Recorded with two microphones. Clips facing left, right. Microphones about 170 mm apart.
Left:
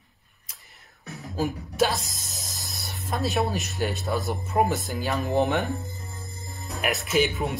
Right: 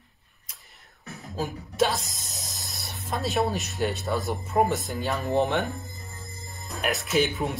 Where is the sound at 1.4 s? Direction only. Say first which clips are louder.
Left 1 dB; centre (ahead or behind).